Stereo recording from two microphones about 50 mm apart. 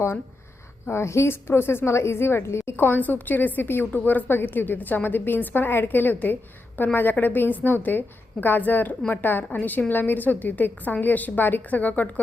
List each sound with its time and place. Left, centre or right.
0.9 s a woman's voice: left
2.7 s a woman's voice: left